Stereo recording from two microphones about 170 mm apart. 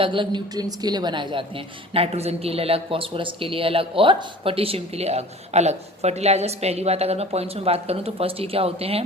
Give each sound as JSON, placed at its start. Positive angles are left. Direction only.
{"t": 0.0, "sound": "a woman's voice", "side_deg": -30}